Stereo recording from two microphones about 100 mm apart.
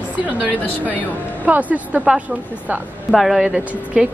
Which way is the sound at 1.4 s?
15° right (ahead or behind).